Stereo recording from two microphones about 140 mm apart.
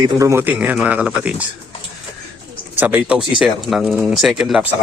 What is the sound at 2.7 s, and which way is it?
A man's voice, 10° right (ahead or behind).